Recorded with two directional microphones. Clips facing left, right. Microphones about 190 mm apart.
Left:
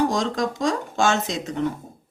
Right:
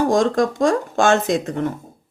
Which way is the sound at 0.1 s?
50° right (ahead or behind).